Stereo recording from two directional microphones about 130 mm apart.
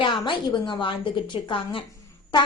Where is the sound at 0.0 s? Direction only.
40° left (ahead or behind).